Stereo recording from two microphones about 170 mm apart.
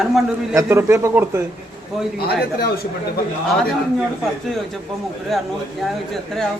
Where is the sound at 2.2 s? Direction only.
65° left (ahead or behind).